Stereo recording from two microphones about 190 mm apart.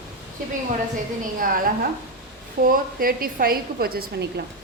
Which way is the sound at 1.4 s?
45° right (ahead or behind).